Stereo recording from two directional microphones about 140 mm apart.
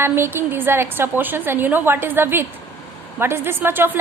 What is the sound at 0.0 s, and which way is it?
A woman's voice, 15° right (ahead or behind).